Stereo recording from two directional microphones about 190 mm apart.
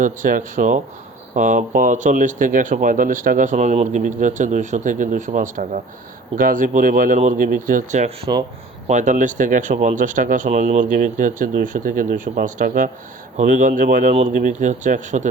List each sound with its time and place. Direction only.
0.0 s speech: 45° right (ahead or behind)